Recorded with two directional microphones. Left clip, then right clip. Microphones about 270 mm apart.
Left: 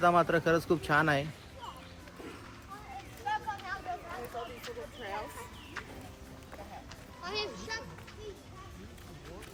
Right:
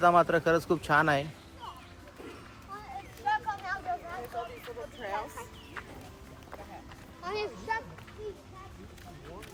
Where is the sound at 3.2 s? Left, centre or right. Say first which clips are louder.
Right 4 dB; centre.